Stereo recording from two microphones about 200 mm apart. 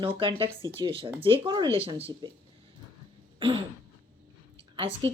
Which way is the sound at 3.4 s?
25° right (ahead or behind).